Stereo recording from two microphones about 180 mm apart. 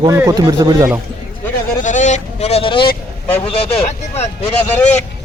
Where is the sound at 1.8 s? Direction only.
45° left (ahead or behind).